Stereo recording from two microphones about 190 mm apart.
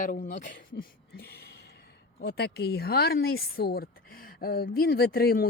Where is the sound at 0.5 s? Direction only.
50° left (ahead or behind).